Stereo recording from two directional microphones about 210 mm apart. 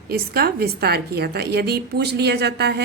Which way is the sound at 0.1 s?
50° right (ahead or behind).